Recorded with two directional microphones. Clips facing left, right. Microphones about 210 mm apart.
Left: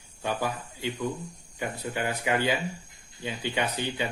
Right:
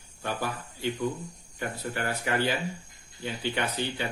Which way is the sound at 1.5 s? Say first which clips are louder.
Left 1 dB; 15° left (ahead or behind).